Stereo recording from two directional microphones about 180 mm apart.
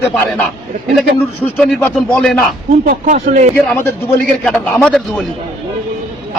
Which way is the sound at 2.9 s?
45° right (ahead or behind).